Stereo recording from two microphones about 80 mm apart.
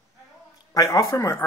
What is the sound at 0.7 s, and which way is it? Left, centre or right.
Speech, left.